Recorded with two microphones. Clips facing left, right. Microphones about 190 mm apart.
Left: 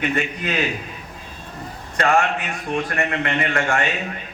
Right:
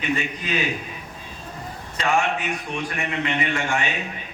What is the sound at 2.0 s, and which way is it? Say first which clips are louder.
A man's voice: left 3 dB; 60° left (ahead or behind).